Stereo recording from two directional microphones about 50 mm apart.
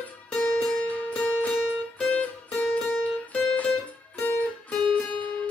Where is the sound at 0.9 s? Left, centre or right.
Left.